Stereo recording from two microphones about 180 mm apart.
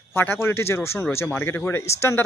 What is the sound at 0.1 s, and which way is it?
Speech, 10° left (ahead or behind).